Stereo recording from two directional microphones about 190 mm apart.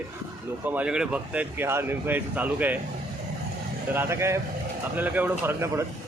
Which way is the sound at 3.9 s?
10° right (ahead or behind).